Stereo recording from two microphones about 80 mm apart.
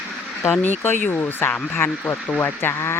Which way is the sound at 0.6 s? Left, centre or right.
Left.